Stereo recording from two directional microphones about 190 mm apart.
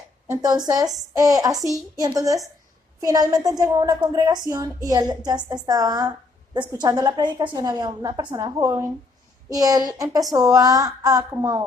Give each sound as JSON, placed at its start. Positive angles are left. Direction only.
{"t": 0.3, "sound": "a woman's voice", "side_deg": -20}